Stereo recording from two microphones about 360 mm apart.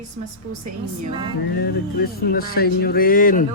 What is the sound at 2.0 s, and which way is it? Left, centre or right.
Mantra, left.